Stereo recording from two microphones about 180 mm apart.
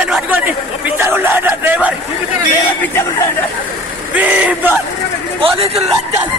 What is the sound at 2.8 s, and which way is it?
Chatter, 15° left (ahead or behind).